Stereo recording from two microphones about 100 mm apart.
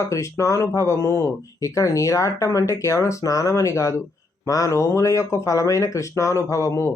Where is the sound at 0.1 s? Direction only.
30° left (ahead or behind).